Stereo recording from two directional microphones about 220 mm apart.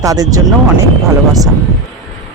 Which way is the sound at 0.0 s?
15° right (ahead or behind).